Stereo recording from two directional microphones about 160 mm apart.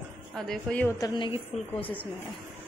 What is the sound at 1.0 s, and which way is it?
Speech, 30° left (ahead or behind).